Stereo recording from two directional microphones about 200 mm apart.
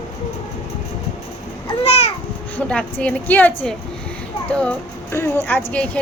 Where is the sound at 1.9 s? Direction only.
30° left (ahead or behind).